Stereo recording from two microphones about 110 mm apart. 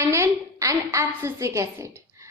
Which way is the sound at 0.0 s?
25° right (ahead or behind).